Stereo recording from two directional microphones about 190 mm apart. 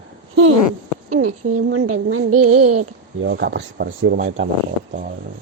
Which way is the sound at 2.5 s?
40° right (ahead or behind).